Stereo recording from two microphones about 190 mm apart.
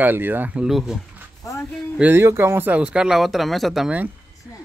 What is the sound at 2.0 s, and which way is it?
Speech, 10° right (ahead or behind).